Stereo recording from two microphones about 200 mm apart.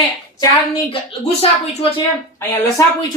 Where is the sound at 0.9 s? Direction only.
30° left (ahead or behind).